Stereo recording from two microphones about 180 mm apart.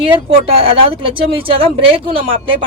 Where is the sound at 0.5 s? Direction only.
30° right (ahead or behind).